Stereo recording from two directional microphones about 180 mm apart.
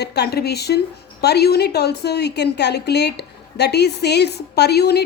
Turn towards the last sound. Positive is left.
turn(degrees=65)  # may be behind; listen again after turning